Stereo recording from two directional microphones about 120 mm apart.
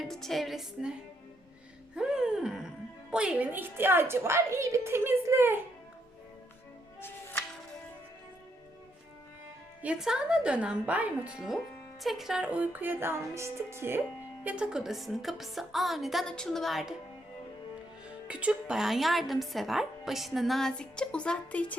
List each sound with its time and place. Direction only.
0.0 s a woman's voice: 5° left (ahead or behind)
2.0 s a sound: 5° right (ahead or behind)
3.1 s a woman's voice: 5° right (ahead or behind)
7.0 s music: 20° left (ahead or behind)
9.8 s music: 5° right (ahead or behind)
14.4 s a woman's voice: 10° right (ahead or behind)
18.3 s a woman's voice: 10° right (ahead or behind); by 21.8 s 10° left (ahead or behind)